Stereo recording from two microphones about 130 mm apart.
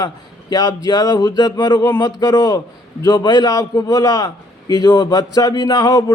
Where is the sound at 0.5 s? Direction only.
30° left (ahead or behind).